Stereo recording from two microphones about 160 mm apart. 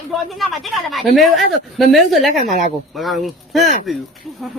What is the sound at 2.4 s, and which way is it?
Speech, 55° left (ahead or behind).